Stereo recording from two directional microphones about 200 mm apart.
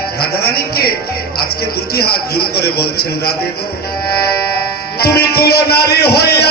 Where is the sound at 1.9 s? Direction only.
50° left (ahead or behind).